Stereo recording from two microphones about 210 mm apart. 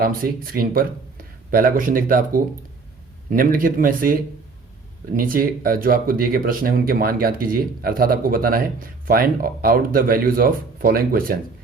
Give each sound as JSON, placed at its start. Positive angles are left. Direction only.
{"t": 0.0, "sound": "speech", "side_deg": -45}